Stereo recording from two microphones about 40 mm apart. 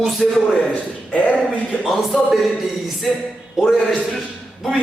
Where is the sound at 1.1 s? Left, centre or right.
Left.